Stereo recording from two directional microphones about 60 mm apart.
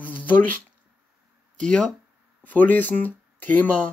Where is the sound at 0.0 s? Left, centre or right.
Left.